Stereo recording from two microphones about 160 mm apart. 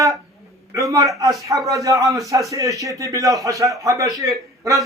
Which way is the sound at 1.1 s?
20° right (ahead or behind).